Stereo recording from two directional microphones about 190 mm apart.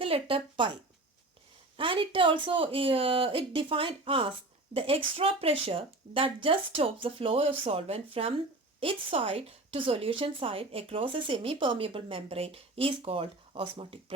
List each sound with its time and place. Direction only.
0.0 s speech: 30° right (ahead or behind)
1.7 s a woman's voice: 25° right (ahead or behind)